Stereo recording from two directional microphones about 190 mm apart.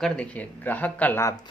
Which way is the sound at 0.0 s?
5° left (ahead or behind).